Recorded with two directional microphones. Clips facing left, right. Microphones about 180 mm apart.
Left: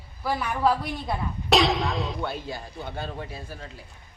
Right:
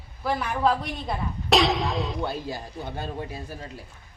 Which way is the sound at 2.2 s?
40° right (ahead or behind).